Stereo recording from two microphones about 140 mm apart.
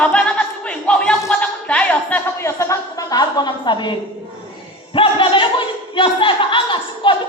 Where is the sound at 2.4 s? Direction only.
20° left (ahead or behind).